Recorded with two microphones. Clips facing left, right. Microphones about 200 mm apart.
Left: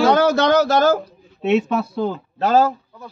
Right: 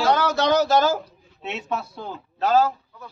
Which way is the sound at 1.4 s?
70° left (ahead or behind).